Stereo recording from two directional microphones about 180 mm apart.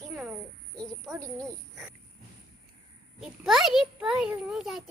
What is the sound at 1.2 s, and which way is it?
Speech, 20° right (ahead or behind).